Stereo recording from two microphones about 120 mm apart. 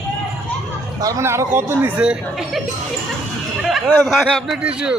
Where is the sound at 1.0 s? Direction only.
30° right (ahead or behind).